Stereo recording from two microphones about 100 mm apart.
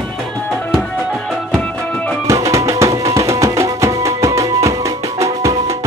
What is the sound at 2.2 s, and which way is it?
Music, 30° right (ahead or behind).